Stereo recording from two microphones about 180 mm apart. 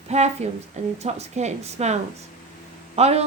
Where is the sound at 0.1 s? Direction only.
40° right (ahead or behind).